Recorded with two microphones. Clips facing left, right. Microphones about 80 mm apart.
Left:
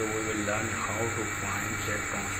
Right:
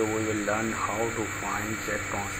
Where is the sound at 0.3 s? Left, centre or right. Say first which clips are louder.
Right 3 dB; centre.